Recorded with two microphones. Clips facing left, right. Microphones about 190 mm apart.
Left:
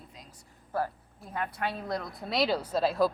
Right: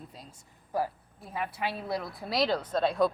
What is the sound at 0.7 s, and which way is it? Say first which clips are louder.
A woman's voice: right 1 dB; 15° right (ahead or behind).